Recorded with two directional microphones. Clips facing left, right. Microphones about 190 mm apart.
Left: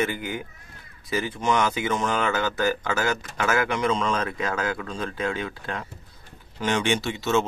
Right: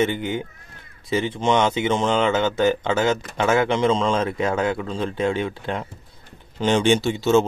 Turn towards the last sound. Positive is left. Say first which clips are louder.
# right 6 dB
turn(degrees=-30)  # may be behind; listen again after turning